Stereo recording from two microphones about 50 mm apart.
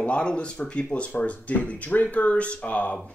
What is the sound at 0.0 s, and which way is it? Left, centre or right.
Speech, left.